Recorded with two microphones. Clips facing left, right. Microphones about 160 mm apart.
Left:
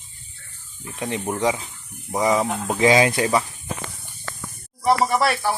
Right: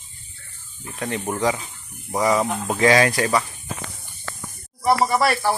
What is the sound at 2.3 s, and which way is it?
Speech, 10° left (ahead or behind).